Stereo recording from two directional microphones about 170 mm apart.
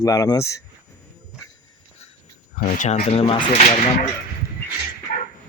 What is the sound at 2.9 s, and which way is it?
Speech, 40° left (ahead or behind).